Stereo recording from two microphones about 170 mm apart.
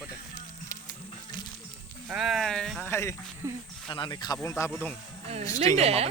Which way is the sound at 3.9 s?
30° left (ahead or behind).